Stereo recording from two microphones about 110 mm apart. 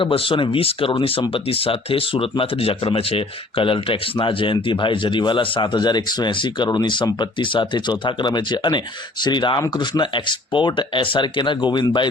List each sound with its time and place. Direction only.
0.0 s speech: 55° left (ahead or behind)